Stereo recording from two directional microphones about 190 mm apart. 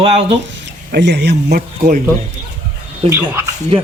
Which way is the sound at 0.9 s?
65° right (ahead or behind).